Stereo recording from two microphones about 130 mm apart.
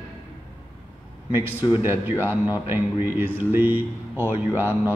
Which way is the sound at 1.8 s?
20° right (ahead or behind).